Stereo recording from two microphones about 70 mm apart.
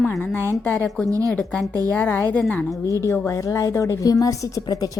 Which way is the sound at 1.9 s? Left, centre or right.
Centre.